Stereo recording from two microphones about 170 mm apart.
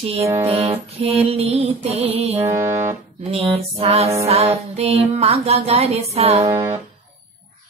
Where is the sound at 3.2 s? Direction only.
35° right (ahead or behind).